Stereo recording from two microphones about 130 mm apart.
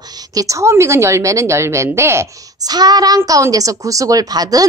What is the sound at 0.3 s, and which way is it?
A woman's voice, 25° right (ahead or behind).